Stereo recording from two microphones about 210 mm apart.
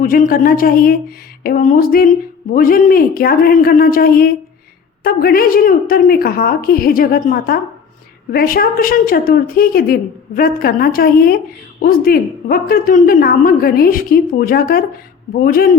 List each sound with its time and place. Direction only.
0.0 s a woman's voice: 40° left (ahead or behind)